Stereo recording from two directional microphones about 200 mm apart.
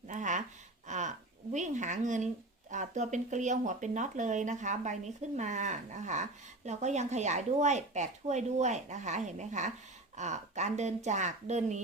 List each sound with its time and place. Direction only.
0.1 s gasp: 40° right (ahead or behind)
0.9 s a sound: 35° right (ahead or behind)
1.5 s speech: 35° right (ahead or behind)